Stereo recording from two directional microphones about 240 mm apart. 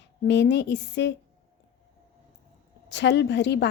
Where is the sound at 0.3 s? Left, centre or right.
Left.